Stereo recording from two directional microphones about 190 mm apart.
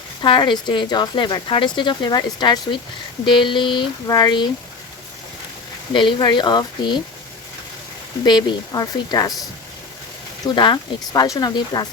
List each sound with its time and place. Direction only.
0.2 s speech: 25° left (ahead or behind)
5.9 s speech: 25° left (ahead or behind)
8.2 s speech: 20° left (ahead or behind)
10.4 s speech: 25° left (ahead or behind)